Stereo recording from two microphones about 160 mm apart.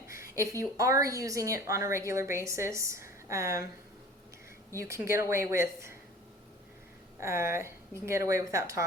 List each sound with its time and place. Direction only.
0.1 s speech: 20° right (ahead or behind)
4.7 s speech: 20° right (ahead or behind)
7.2 s speech: 15° right (ahead or behind)